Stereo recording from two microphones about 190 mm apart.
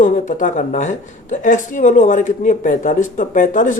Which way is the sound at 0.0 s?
45° left (ahead or behind).